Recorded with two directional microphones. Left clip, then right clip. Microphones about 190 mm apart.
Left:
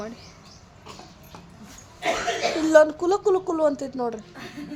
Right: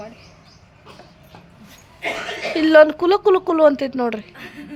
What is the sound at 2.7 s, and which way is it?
Speech, 15° right (ahead or behind).